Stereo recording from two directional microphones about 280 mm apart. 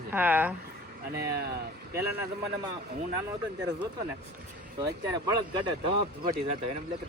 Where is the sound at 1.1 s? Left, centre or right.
Right.